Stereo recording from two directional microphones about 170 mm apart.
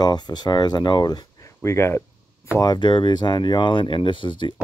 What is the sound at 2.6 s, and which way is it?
Speech, 25° left (ahead or behind).